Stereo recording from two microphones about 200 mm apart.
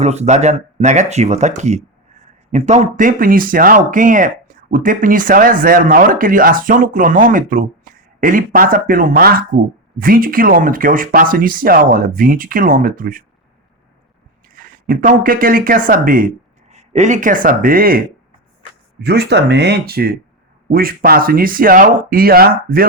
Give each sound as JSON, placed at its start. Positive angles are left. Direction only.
{"t": 0.0, "sound": "speech", "side_deg": -35}
{"t": 14.5, "sound": "speech", "side_deg": -45}
{"t": 19.0, "sound": "speech", "side_deg": -55}